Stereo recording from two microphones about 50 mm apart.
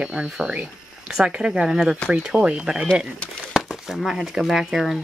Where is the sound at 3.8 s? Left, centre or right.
Centre.